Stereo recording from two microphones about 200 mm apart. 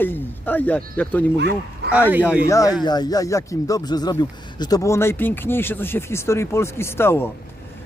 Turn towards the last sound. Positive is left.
turn(degrees=10)  # may be behind; listen again after turning